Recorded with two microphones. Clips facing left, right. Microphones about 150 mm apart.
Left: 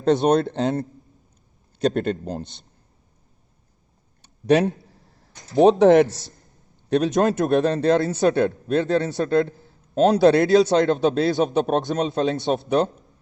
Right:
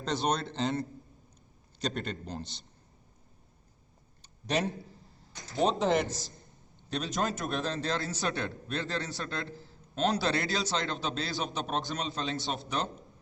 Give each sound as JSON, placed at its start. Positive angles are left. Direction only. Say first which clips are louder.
{"t": 0.0, "sound": "a man's voice", "louder": "left 13 dB", "side_deg": 55}
{"t": 4.2, "sound": "a sound", "louder": "left 13 dB", "side_deg": 60}
{"t": 5.8, "sound": "a man's voice", "louder": "left 15 dB", "side_deg": 75}
{"t": 6.8, "sound": "a man's voice", "louder": "left 13 dB", "side_deg": 60}